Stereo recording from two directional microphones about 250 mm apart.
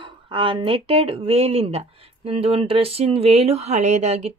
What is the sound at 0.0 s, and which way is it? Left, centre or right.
Speech, centre.